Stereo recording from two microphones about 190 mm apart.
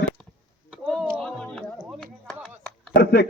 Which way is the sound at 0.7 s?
Centre (ahead or behind).